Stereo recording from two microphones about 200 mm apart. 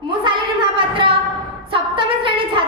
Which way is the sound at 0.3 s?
25° right (ahead or behind).